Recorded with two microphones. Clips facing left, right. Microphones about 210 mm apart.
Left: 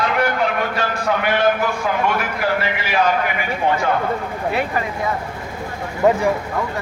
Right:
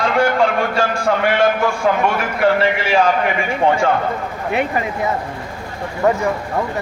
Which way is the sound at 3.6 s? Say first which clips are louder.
Right 4 dB; 80° right.